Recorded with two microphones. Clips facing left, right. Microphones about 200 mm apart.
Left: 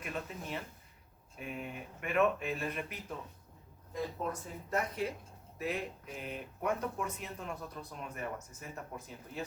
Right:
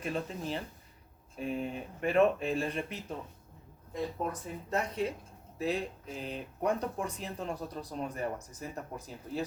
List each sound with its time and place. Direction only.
0.0 s speech: 30° right (ahead or behind)
4.7 s speech: 25° right (ahead or behind)